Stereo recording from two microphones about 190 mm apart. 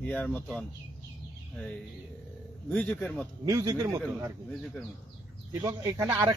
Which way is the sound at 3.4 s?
20° right (ahead or behind).